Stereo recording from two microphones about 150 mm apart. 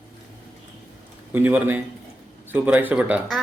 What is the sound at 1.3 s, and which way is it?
Speech, 10° right (ahead or behind).